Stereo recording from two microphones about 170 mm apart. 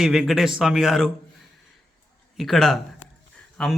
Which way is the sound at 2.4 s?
Centre (ahead or behind).